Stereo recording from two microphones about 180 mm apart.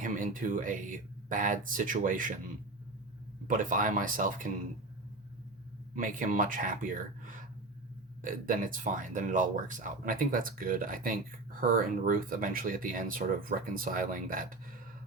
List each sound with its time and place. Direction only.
0.0 s speech: 45° right (ahead or behind)
3.4 s speech: 45° right (ahead or behind)
5.9 s speech: 45° right (ahead or behind)